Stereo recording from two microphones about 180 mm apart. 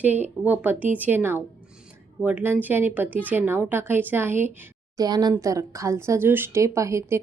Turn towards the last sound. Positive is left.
turn(degrees=-15)  # may be behind; listen again after turning